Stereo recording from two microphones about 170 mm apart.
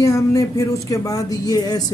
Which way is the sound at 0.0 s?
15° left (ahead or behind).